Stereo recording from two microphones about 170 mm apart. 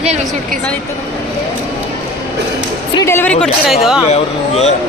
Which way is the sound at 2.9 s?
15° left (ahead or behind).